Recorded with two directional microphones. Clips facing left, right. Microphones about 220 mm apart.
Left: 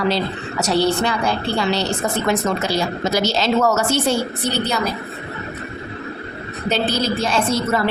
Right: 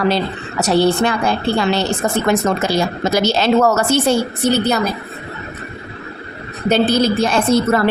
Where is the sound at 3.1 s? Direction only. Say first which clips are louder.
Right 4 dB; 55° right (ahead or behind).